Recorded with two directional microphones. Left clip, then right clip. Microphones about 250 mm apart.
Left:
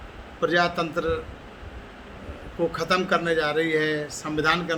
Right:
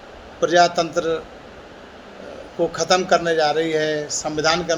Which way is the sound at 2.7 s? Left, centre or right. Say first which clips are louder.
Right 6 dB; centre.